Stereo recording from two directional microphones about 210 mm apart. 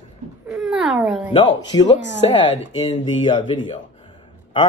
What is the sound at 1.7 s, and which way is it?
A man's voice, 20° left (ahead or behind).